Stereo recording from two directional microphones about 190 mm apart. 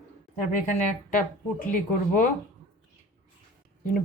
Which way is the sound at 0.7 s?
45° left (ahead or behind).